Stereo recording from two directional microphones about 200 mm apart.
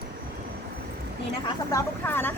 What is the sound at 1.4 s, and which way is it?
Speech, 15° left (ahead or behind).